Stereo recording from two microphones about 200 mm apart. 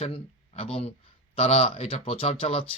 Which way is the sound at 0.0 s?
30° left (ahead or behind).